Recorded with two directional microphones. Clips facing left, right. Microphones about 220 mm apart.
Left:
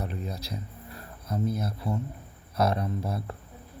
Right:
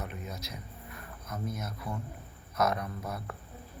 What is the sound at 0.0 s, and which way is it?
Cricket, 35° left (ahead or behind).